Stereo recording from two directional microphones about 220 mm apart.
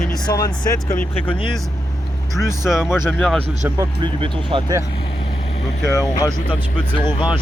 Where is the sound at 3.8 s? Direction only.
20° right (ahead or behind).